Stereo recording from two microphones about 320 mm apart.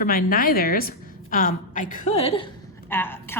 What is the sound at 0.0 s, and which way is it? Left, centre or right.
A woman's voice, left.